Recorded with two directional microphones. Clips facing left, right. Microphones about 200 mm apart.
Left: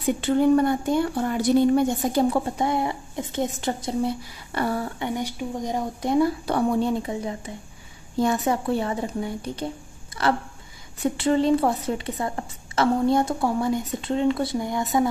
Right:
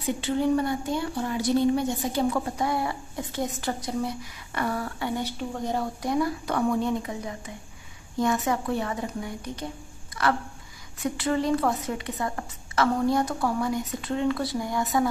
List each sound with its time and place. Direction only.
0.2 s speech: 50° left (ahead or behind)
2.2 s a woman's voice: 30° left (ahead or behind)
11.0 s a woman's voice: 25° left (ahead or behind)